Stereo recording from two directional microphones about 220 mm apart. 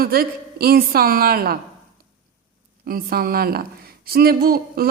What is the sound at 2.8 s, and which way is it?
A woman's voice, 45° right (ahead or behind).